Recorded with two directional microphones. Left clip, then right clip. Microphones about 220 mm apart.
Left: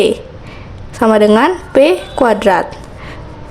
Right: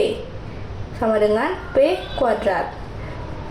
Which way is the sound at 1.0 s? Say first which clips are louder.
Left 9 dB; 45° left (ahead or behind).